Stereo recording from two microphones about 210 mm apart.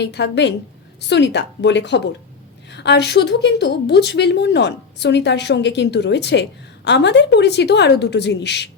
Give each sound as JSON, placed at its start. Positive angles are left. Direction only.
{"t": 0.0, "sound": "a woman's voice", "side_deg": 55}